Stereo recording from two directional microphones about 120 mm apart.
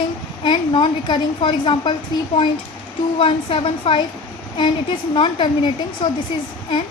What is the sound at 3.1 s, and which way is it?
Speech, 45° left (ahead or behind).